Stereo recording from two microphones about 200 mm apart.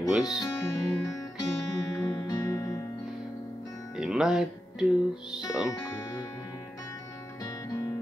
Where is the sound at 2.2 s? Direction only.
20° left (ahead or behind).